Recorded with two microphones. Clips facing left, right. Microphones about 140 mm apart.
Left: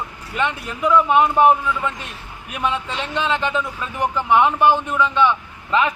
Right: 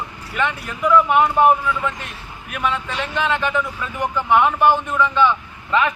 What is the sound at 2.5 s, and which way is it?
A man's voice, 20° left (ahead or behind).